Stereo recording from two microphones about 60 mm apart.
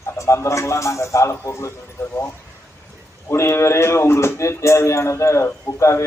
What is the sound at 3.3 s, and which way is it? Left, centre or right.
A man's voice, left.